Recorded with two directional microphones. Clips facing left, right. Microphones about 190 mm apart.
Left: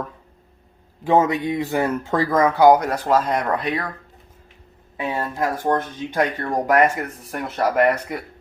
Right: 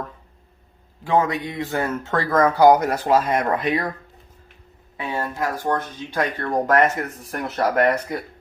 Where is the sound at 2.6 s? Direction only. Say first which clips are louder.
Left 1 dB; centre (ahead or behind).